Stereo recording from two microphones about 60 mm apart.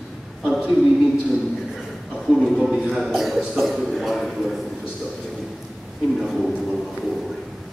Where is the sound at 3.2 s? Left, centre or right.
Centre.